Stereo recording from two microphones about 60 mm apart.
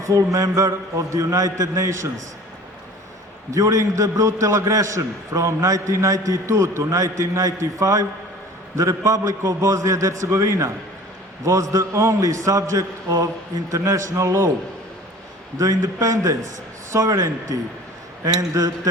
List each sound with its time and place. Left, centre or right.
0.0 s a man's voice: right
3.5 s a man's voice: right
15.5 s a man's voice: right